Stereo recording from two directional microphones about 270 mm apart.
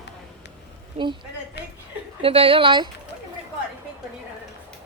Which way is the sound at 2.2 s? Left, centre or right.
Right.